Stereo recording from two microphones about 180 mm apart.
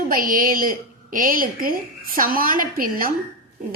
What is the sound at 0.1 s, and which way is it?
A woman's voice, 50° right (ahead or behind).